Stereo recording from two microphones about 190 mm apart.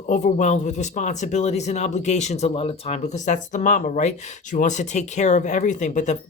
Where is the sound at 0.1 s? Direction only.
40° left (ahead or behind).